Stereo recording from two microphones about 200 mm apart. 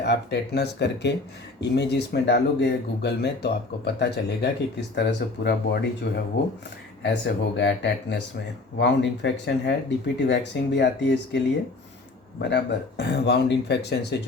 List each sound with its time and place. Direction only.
0.0 s speech: 55° left (ahead or behind)